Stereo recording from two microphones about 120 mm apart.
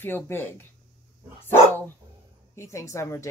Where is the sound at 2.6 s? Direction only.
25° left (ahead or behind).